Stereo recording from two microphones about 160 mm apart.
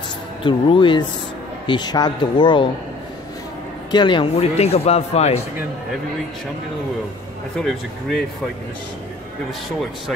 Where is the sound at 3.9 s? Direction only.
30° left (ahead or behind).